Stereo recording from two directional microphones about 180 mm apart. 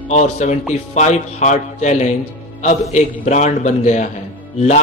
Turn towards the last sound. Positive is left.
turn(degrees=40)  # may be behind; listen again after turning